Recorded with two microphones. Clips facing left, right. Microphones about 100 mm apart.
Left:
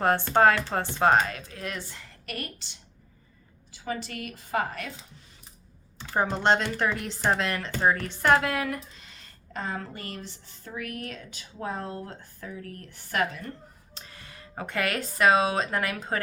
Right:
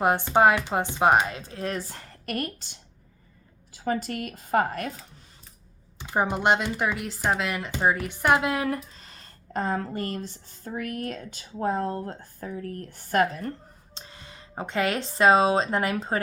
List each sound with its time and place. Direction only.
0.0 s speech: 15° right (ahead or behind); by 2.7 s 45° right (ahead or behind)
3.8 s speech: 45° right (ahead or behind)
6.0 s speech: 15° right (ahead or behind)
8.6 s speech: 35° right (ahead or behind)
13.9 s speech: 25° right (ahead or behind)